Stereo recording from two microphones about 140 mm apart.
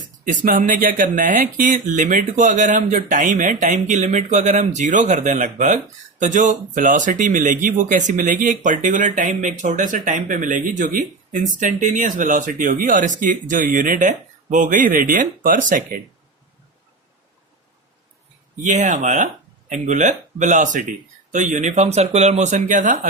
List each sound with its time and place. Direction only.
0.4 s speech: 65° right (ahead or behind)
18.6 s speech: 60° right (ahead or behind)